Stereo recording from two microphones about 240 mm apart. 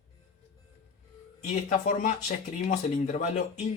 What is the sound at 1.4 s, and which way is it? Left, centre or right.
Speech, left.